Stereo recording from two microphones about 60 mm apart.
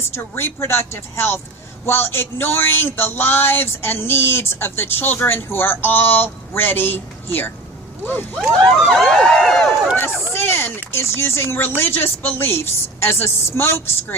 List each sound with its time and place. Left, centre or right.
0.1 s a man's voice: left
8.4 s a sound: centre
10.0 s a man's voice: left